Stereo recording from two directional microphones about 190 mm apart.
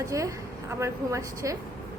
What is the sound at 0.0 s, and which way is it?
Speech, 15° right (ahead or behind).